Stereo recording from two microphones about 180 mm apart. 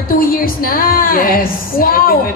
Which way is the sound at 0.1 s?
55° left (ahead or behind).